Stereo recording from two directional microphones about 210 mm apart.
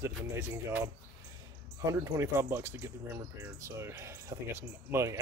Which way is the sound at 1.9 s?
15° right (ahead or behind).